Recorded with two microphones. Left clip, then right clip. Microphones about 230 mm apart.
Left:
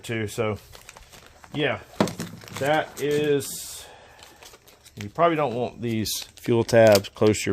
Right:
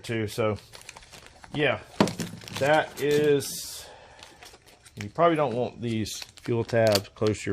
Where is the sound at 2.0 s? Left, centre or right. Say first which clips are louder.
Even; centre.